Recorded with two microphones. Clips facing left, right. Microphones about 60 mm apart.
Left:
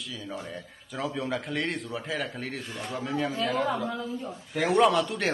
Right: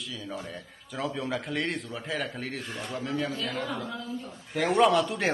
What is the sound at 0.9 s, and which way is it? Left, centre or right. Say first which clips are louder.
A man's voice: left 1 dB; centre.